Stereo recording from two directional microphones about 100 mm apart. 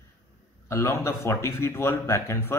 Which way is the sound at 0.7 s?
30° left (ahead or behind).